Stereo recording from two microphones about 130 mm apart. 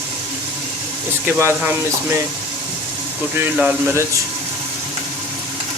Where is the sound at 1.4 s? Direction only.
20° right (ahead or behind).